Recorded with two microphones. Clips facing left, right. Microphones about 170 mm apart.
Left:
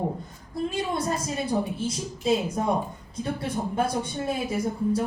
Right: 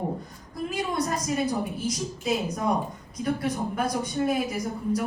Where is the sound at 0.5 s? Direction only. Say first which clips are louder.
Left 1 dB; 30° left (ahead or behind).